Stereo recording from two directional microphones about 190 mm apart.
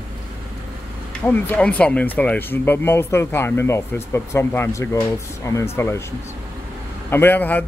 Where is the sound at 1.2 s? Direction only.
10° left (ahead or behind).